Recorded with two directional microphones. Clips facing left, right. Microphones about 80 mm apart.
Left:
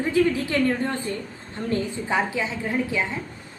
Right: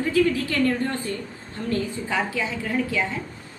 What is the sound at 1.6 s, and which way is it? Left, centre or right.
A woman's voice, left.